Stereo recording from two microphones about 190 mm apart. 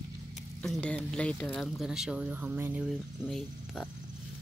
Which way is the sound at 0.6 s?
5° left (ahead or behind).